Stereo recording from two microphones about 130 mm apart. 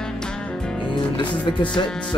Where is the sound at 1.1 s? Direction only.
40° left (ahead or behind).